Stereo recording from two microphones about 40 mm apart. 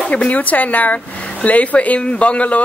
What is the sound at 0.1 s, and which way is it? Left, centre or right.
Speech, left.